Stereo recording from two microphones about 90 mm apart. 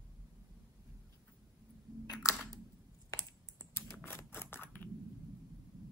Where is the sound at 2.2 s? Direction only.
35° left (ahead or behind).